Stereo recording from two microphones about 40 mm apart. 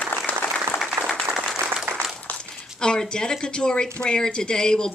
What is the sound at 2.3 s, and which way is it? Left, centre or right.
Speech, left.